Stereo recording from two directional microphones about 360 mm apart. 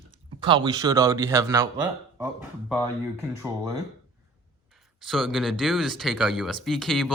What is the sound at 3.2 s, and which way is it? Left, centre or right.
Speech, centre.